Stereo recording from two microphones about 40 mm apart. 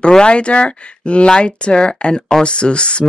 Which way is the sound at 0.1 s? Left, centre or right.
Left.